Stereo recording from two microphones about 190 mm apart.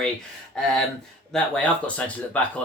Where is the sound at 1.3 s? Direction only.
5° left (ahead or behind).